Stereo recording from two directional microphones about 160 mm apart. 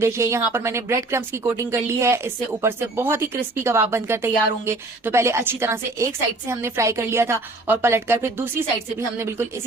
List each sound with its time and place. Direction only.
0.0 s speech: 15° right (ahead or behind)